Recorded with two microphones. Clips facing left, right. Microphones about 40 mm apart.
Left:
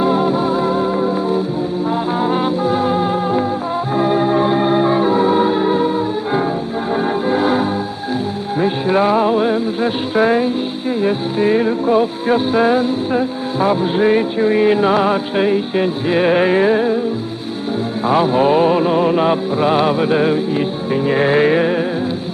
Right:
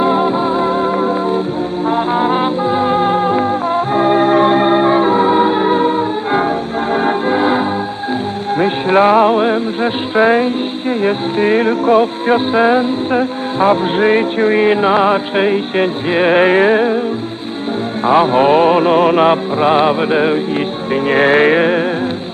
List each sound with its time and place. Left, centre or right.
0.0 s music: right
2.1 s music: right
3.9 s organ: right
7.3 s music: right
8.6 s music: right
12.3 s music: right
18.0 s music: right
20.9 s music: right